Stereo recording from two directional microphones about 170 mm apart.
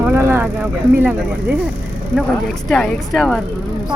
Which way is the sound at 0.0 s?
15° right (ahead or behind).